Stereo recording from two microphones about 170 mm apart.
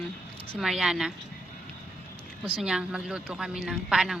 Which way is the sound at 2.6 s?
5° right (ahead or behind).